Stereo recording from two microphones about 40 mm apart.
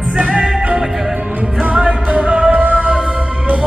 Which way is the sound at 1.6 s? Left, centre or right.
Right.